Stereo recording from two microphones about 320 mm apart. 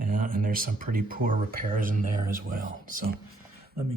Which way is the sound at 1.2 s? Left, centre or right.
Right.